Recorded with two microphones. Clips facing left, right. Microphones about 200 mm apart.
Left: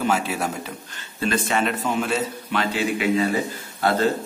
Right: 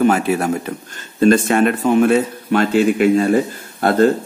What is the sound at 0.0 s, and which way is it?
Speech, 55° right (ahead or behind).